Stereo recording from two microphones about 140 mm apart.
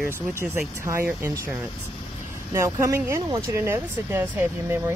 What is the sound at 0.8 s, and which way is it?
Speech, 15° right (ahead or behind).